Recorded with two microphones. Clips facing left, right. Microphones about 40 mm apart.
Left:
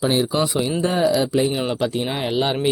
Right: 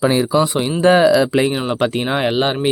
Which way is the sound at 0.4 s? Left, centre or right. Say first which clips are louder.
Right 3 dB; right.